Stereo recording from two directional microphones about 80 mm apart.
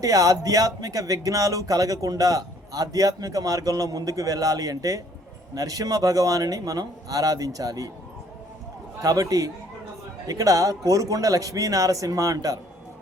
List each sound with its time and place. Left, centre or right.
0.0 s speech: right
9.0 s speech: right